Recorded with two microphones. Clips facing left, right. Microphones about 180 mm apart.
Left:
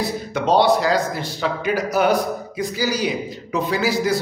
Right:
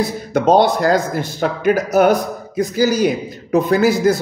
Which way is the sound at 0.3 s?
50° right (ahead or behind).